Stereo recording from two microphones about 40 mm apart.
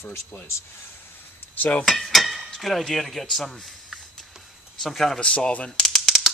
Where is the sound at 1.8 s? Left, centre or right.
Centre.